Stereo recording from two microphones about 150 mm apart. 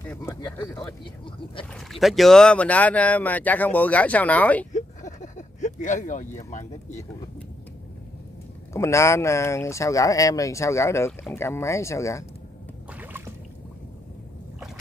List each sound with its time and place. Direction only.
0.2 s speech: 25° left (ahead or behind)
1.7 s speech: centre (ahead or behind)
4.7 s a sound: 55° left (ahead or behind)
8.7 s speech: 20° left (ahead or behind)